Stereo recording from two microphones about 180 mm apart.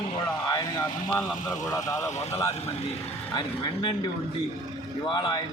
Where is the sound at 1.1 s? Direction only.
Centre (ahead or behind).